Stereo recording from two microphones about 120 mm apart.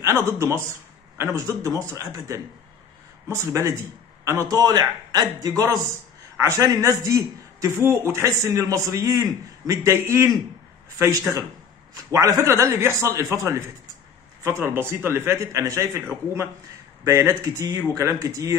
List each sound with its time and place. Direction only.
0.0 s a man's voice: 25° right (ahead or behind)
14.7 s a man's voice: 20° right (ahead or behind)
17.0 s a man's voice: 25° right (ahead or behind)